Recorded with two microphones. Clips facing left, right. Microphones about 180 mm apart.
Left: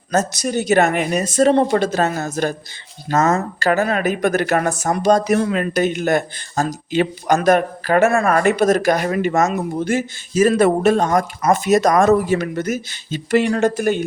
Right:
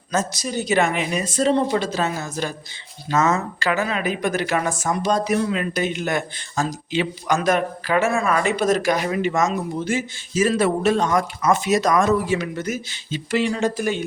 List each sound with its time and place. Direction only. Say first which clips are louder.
0.4 s speech: left 5 dB; 50° left (ahead or behind)
9.8 s speech: left 4 dB; 45° left (ahead or behind)